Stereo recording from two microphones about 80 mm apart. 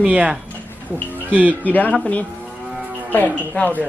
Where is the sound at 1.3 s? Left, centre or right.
Right.